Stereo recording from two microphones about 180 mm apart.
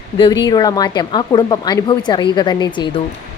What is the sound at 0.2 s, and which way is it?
A woman's voice, 25° left (ahead or behind).